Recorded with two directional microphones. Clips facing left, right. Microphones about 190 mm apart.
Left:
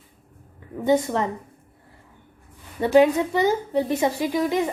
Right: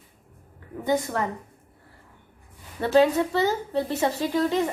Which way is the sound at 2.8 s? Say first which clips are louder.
Left 3 dB; 15° left (ahead or behind).